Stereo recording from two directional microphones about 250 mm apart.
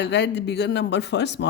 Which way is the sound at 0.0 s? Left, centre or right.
Left.